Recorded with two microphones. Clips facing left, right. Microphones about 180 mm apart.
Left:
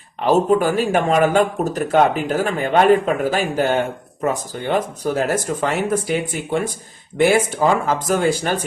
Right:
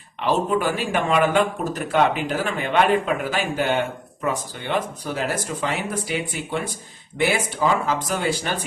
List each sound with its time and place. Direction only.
0.2 s speech: 40° left (ahead or behind)